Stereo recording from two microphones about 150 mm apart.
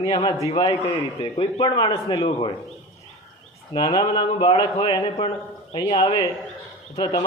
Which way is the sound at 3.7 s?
35° left (ahead or behind).